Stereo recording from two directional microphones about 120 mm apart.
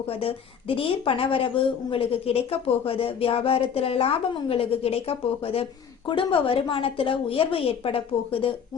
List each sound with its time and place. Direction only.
0.1 s a woman's voice: 55° left (ahead or behind)